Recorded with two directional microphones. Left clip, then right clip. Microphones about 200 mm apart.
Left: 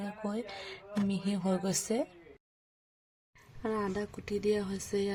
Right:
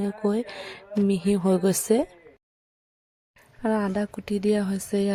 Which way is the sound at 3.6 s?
30° right (ahead or behind).